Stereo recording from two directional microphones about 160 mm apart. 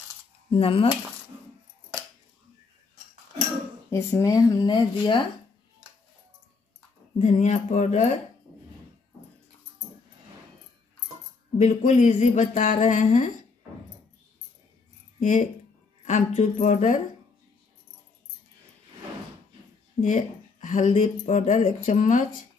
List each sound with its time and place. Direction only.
0.5 s speech: 35° left (ahead or behind)
3.9 s speech: 20° left (ahead or behind)
7.2 s speech: 45° left (ahead or behind)
11.5 s speech: 50° left (ahead or behind)
15.1 s speech: 55° left (ahead or behind)
20.0 s speech: 50° left (ahead or behind)